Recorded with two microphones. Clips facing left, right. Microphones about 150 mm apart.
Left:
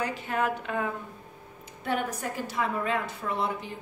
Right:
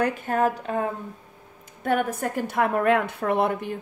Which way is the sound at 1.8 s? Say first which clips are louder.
Right 6 dB; 50° right (ahead or behind).